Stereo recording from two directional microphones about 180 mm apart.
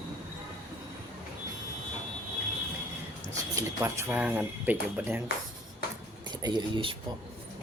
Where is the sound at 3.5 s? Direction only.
15° right (ahead or behind).